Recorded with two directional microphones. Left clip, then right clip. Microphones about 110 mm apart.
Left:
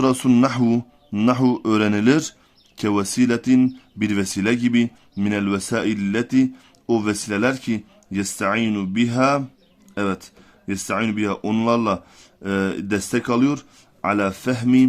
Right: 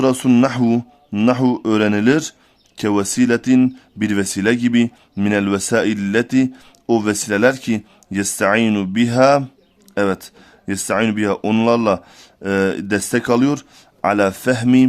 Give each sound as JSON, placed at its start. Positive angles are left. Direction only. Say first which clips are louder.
{"t": 0.0, "sound": "speech", "louder": "right 3 dB", "side_deg": -25}